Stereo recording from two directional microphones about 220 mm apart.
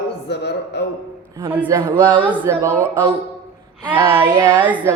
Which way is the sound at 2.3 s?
10° right (ahead or behind).